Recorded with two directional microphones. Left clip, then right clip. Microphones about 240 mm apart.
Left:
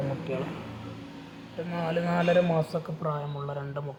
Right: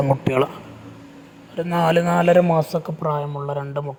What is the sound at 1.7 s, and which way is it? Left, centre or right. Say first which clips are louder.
A man's voice: right 12 dB; right.